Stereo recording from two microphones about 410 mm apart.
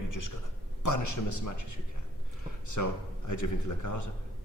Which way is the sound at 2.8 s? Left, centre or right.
Left.